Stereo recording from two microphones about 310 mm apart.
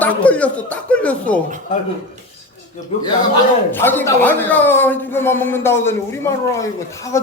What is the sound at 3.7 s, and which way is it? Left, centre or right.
A man's voice, centre.